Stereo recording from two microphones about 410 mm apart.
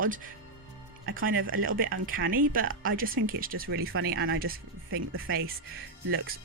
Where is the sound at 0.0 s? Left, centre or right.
Centre.